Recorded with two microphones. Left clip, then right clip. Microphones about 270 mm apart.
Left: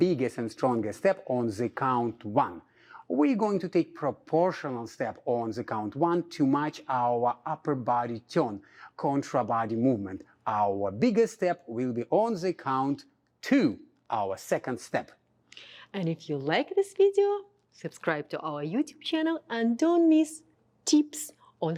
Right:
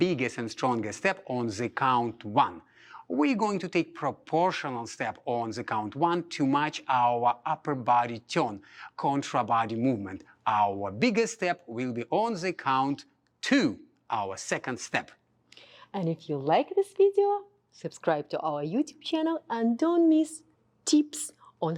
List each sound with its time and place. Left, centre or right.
0.2 s speech: right
15.5 s a woman's voice: centre
21.6 s speech: centre